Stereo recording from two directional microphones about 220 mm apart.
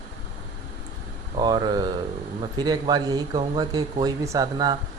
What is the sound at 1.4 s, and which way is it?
Speech, 20° right (ahead or behind).